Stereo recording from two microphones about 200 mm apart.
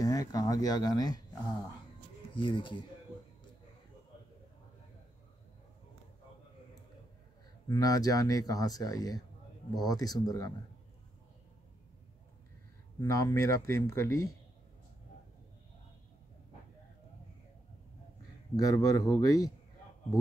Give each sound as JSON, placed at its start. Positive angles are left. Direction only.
{"t": 0.0, "sound": "speech", "side_deg": 15}
{"t": 7.6, "sound": "speech", "side_deg": 20}
{"t": 13.0, "sound": "speech", "side_deg": 15}
{"t": 18.6, "sound": "speech", "side_deg": 15}